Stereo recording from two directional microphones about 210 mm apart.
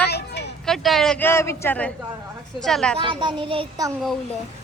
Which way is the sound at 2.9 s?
25° right (ahead or behind).